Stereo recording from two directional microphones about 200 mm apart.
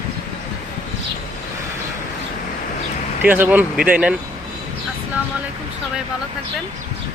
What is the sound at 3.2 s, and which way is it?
Speech, 10° right (ahead or behind).